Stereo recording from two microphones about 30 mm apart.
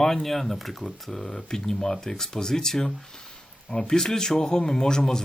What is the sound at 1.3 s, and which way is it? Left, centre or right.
Speech, centre.